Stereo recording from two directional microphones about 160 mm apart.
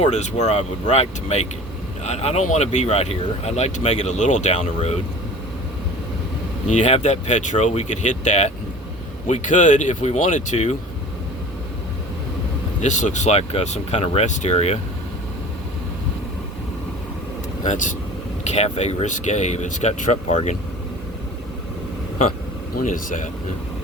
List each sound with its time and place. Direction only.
0.0 s speech: 45° left (ahead or behind)
6.7 s speech: 45° left (ahead or behind)
12.8 s speech: 50° left (ahead or behind)
17.6 s speech: 50° left (ahead or behind)
22.7 s speech: 55° left (ahead or behind)